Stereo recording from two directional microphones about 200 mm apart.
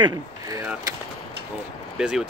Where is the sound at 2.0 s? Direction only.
5° right (ahead or behind).